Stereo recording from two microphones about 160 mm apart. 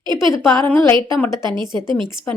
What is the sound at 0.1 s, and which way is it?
A woman's voice, 30° right (ahead or behind).